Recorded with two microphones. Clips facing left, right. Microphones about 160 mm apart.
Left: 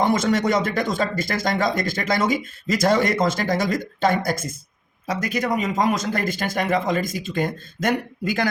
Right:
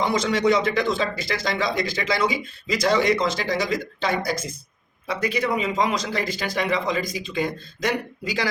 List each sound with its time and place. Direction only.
0.0 s speech: 50° left (ahead or behind)